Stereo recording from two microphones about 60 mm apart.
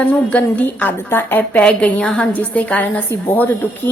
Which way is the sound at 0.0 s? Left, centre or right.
Left.